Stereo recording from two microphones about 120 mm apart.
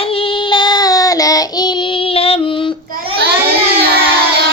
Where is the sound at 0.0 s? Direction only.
50° left (ahead or behind).